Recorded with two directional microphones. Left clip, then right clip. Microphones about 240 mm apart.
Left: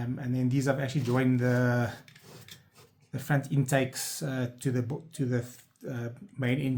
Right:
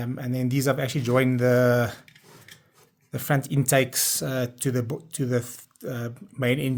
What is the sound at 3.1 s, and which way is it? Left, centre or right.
Speech, right.